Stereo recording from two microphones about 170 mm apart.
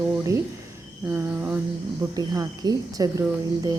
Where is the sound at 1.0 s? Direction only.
10° right (ahead or behind).